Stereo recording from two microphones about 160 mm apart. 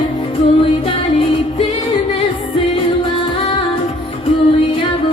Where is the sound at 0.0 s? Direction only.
30° left (ahead or behind).